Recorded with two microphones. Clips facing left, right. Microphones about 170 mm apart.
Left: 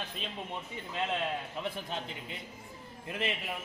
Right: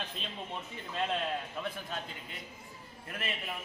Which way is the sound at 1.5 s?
20° left (ahead or behind).